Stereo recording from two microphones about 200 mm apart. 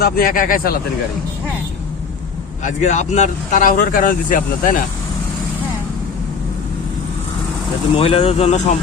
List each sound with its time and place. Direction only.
0.0 s speech: 45° left (ahead or behind)
2.6 s speech: 35° left (ahead or behind)
7.9 s speech: 30° left (ahead or behind)